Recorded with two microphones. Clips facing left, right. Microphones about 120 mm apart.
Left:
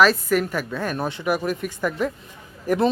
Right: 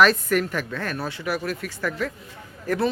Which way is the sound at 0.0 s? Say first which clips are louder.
Left 1 dB; 5° left (ahead or behind).